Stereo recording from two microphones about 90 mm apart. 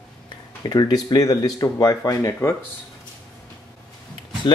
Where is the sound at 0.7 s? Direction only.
50° left (ahead or behind).